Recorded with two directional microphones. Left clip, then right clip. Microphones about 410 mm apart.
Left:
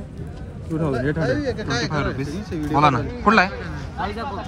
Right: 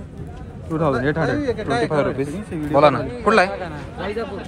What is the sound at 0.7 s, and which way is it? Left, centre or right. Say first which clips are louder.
Speech: right 4 dB; centre.